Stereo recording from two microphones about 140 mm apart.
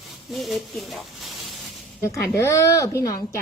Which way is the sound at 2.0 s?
20° left (ahead or behind).